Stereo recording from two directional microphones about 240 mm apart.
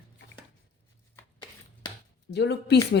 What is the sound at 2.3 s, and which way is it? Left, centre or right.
Speech, left.